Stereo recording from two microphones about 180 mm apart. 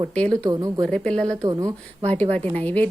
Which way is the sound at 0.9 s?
5° left (ahead or behind).